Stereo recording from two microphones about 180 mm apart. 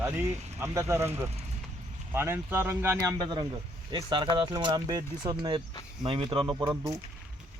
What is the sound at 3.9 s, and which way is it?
Speech, 25° right (ahead or behind).